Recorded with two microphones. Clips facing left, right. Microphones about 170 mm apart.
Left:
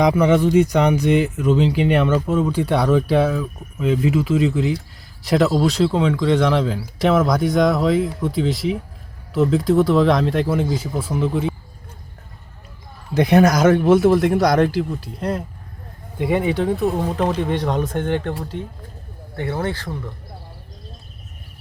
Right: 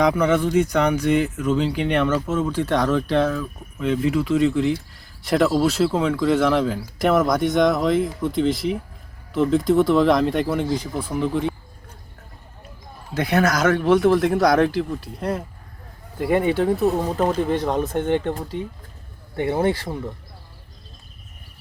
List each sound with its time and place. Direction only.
0.0 s speech: 10° left (ahead or behind)
13.1 s speech: 20° left (ahead or behind); by 18.6 s 5° right (ahead or behind)
19.4 s speech: 20° right (ahead or behind)